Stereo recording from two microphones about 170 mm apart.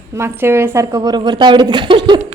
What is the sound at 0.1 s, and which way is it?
A woman's voice, 15° right (ahead or behind).